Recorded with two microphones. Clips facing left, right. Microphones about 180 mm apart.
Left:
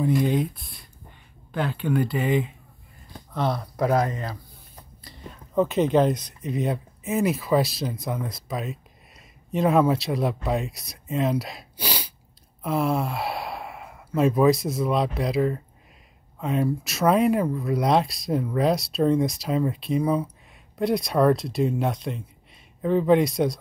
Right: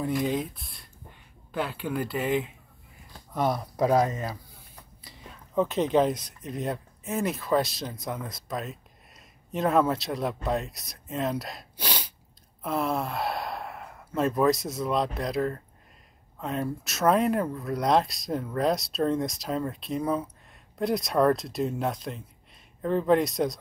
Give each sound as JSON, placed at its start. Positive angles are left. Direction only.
{"t": 0.0, "sound": "speech", "side_deg": 0}
{"t": 3.3, "sound": "speech", "side_deg": -15}
{"t": 5.0, "sound": "speech", "side_deg": 0}